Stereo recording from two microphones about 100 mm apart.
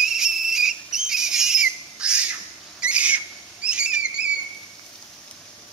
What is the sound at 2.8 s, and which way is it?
Owl, 10° right (ahead or behind).